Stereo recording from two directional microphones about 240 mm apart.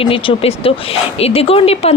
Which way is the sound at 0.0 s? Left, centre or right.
Left.